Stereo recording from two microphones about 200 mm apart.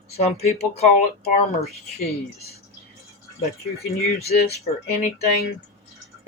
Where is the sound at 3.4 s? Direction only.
30° left (ahead or behind).